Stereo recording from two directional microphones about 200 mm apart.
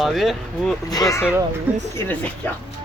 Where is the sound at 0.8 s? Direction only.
15° left (ahead or behind).